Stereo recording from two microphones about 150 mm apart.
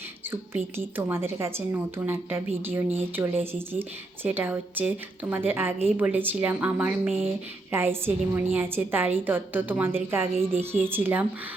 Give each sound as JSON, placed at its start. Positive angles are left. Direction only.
{"t": 0.3, "sound": "a woman's voice", "side_deg": -15}